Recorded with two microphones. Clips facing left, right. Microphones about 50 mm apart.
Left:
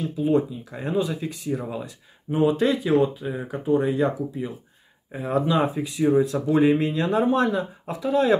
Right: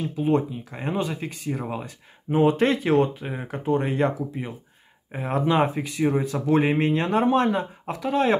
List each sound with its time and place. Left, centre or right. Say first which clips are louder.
0.1 s speech: left 1 dB; right